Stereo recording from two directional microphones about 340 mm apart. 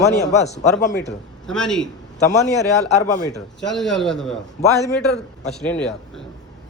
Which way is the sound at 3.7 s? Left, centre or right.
Centre.